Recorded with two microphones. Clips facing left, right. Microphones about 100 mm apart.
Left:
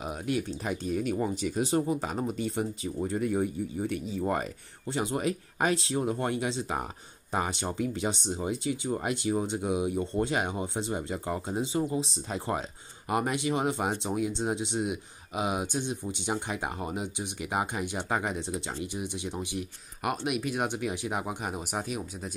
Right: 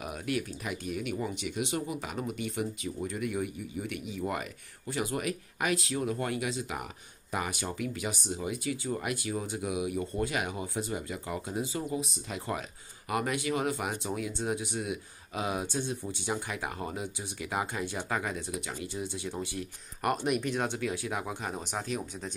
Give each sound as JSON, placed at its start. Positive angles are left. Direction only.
{"t": 0.0, "sound": "speech", "side_deg": 25}